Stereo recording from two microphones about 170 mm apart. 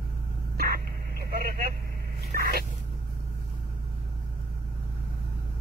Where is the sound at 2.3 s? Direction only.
65° right (ahead or behind).